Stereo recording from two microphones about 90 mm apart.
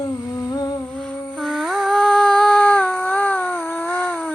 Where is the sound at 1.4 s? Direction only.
Centre (ahead or behind); by 4.1 s 20° left (ahead or behind).